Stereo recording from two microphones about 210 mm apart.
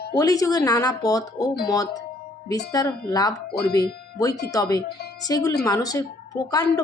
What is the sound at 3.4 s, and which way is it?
Speech, 50° left (ahead or behind).